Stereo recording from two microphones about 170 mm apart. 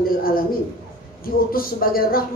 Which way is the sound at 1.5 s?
60° left (ahead or behind).